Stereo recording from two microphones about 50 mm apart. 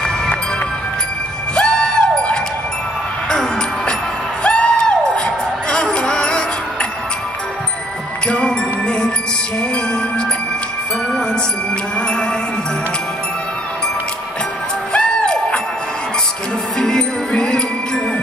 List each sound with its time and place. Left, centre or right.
1.5 s music: centre
8.3 s music: centre
14.9 s music: centre
16.7 s music: centre